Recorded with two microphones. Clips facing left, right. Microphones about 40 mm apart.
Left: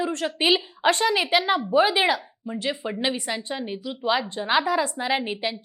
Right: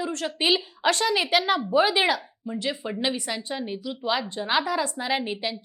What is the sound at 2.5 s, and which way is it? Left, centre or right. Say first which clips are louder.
Speech: left 1 dB; left.